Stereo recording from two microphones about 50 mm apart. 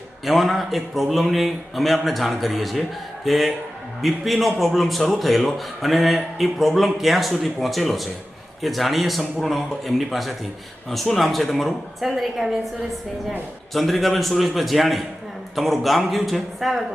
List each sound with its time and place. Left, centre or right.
0.3 s a man's voice: centre
13.7 s a man's voice: centre